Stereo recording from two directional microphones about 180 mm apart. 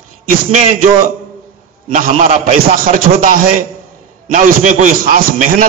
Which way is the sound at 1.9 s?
50° right (ahead or behind).